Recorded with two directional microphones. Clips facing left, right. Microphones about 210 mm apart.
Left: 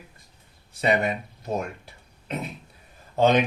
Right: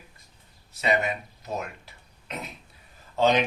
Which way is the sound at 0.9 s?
30° left (ahead or behind).